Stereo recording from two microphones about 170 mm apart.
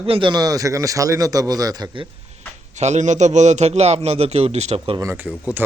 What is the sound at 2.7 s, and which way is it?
A man's voice, 45° right (ahead or behind).